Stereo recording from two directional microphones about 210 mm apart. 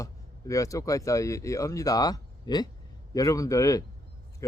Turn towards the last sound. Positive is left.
turn(degrees=15)  # may be behind; listen again after turning